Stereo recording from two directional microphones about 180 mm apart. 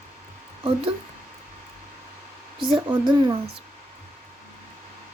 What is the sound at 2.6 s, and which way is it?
Speech, 25° right (ahead or behind).